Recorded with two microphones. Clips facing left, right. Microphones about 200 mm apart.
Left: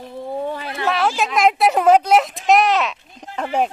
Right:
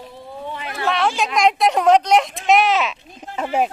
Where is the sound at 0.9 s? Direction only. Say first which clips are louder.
Even; centre (ahead or behind).